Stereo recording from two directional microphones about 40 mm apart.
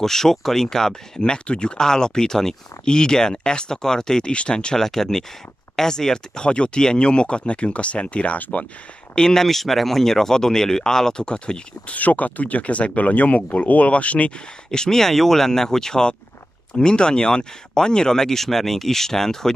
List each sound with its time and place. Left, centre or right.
0.0 s speech: centre
1.2 s speech: left
4.8 s speech: centre; by 8.6 s left
9.1 s speech: centre
11.9 s speech: left
14.7 s speech: centre